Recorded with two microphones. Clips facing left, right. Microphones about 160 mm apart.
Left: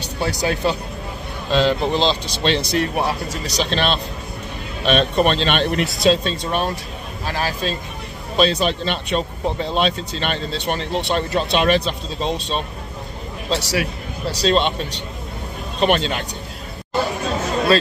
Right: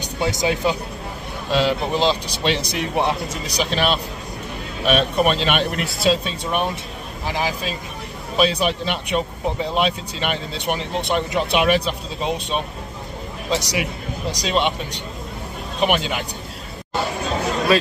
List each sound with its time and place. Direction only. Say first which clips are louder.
0.0 s speech: right 1 dB; 20° right (ahead or behind)
3.4 s speech: even; 10° right (ahead or behind)